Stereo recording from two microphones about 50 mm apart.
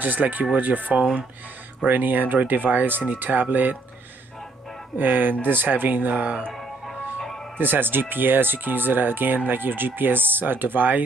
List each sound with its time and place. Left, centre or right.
0.0 s speech: right
4.9 s speech: right
6.5 s music: centre
7.5 s speech: right